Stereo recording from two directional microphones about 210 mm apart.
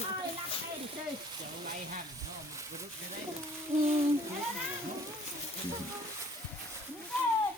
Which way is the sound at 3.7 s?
15° right (ahead or behind).